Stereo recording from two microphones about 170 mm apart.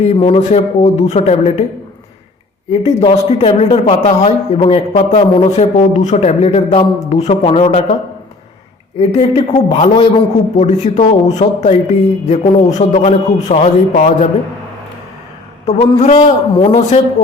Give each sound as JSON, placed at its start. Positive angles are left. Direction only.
{"t": 0.0, "sound": "a man's voice", "side_deg": 35}
{"t": 2.8, "sound": "a man's voice", "side_deg": 35}
{"t": 9.0, "sound": "a man's voice", "side_deg": 35}
{"t": 15.6, "sound": "a man's voice", "side_deg": 40}